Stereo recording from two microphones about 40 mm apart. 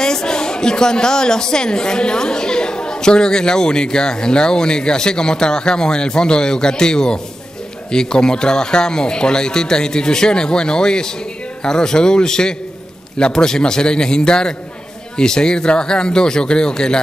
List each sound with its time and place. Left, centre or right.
0.0 s a woman's voice: centre